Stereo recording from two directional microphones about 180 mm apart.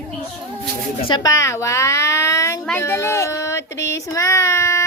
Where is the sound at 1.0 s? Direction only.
25° left (ahead or behind).